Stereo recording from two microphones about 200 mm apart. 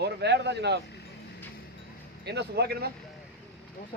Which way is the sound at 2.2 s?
55° right (ahead or behind).